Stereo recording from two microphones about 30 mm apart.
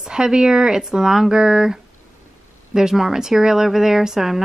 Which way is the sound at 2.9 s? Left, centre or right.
Centre.